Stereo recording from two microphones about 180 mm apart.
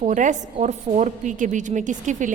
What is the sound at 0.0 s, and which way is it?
A woman's voice, 45° right (ahead or behind).